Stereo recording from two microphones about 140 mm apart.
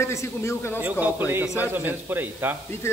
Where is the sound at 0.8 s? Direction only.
10° right (ahead or behind).